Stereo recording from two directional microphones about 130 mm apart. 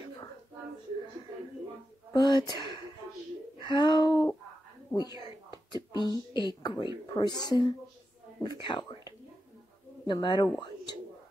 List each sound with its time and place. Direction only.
2.1 s a woman's voice: 30° left (ahead or behind)